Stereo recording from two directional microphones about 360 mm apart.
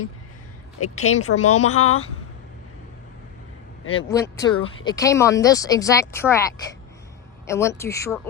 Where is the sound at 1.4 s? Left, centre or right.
Left.